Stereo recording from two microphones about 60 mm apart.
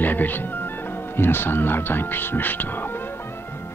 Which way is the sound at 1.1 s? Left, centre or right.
Left.